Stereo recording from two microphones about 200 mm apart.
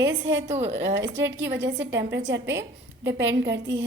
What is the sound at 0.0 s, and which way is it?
A woman's voice, 65° right (ahead or behind).